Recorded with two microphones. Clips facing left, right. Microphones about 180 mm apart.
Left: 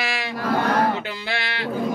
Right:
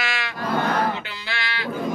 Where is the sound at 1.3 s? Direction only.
60° left (ahead or behind).